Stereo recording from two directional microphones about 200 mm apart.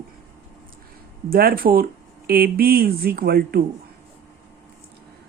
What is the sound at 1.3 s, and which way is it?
Speech, 45° right (ahead or behind).